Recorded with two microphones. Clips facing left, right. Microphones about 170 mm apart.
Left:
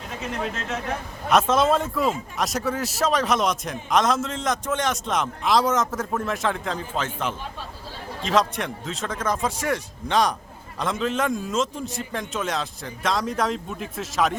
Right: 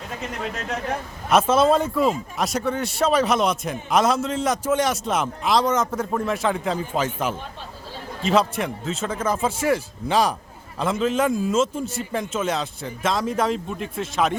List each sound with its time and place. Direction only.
1.3 s a man's voice: centre (ahead or behind)